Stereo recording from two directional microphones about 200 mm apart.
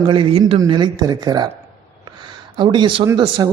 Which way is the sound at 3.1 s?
20° right (ahead or behind).